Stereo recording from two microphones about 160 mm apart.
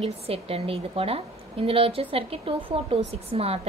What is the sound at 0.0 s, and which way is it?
A woman's voice, 40° right (ahead or behind).